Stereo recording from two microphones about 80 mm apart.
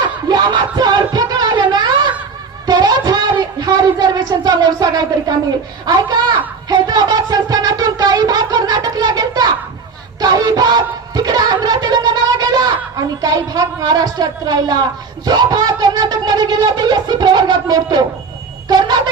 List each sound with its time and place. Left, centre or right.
0.3 s music: right
2.6 s a sound: right
5.8 s a woman's voice: right
6.7 s a sound: right
10.2 s music: right
13.2 s a woman's voice: right